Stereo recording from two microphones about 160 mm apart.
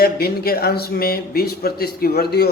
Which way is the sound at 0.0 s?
75° left (ahead or behind).